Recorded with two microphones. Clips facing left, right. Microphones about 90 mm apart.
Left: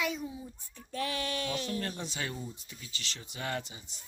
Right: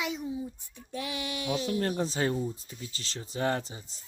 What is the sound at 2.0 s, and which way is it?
Speech, 35° right (ahead or behind).